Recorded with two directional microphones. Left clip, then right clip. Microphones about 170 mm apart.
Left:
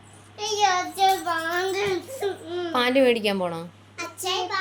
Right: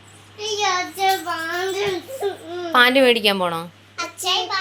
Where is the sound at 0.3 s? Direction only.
40° left (ahead or behind).